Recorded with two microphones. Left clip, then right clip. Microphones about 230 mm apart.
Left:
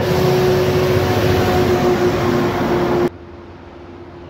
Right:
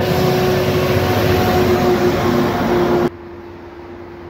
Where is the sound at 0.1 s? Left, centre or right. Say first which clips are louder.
Left 3 dB; centre.